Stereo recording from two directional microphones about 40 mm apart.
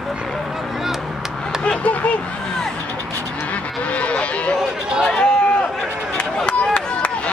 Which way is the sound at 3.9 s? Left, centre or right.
Left.